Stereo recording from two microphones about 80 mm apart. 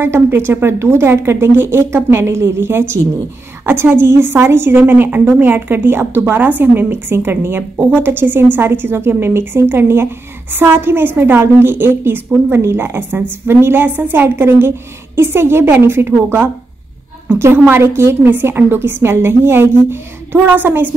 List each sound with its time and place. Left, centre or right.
0.0 s a woman's voice: right